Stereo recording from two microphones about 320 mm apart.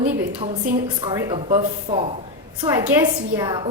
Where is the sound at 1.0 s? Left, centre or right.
Centre.